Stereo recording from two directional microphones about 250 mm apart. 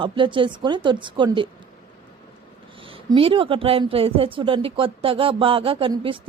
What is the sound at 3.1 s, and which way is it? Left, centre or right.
A woman's voice, right.